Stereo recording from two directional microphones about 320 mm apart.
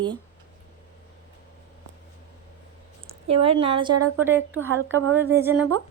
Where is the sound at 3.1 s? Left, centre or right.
Centre.